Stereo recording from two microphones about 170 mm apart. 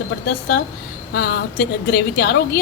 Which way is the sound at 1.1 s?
70° left (ahead or behind).